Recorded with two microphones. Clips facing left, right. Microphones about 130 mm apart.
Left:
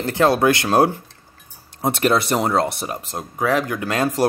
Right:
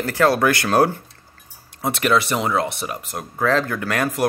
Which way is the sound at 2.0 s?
45° left (ahead or behind).